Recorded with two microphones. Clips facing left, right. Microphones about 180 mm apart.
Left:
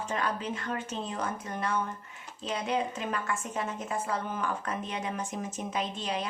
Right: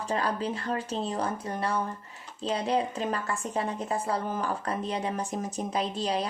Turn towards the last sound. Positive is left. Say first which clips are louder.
# right 4 dB
turn(degrees=-35)  # may be behind; listen again after turning